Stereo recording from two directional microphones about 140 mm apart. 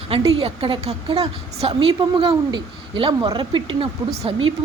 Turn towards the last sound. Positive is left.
turn(degrees=-40)  # may be behind; listen again after turning